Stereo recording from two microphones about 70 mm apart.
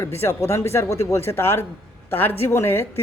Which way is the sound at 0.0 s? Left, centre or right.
Left.